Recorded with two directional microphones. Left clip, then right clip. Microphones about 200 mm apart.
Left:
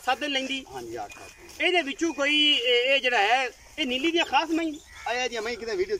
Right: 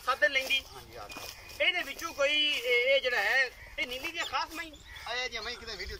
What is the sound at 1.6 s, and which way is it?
Speech, 60° left (ahead or behind).